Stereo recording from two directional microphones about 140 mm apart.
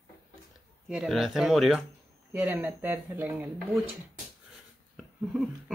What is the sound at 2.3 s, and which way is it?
Speech, 15° right (ahead or behind).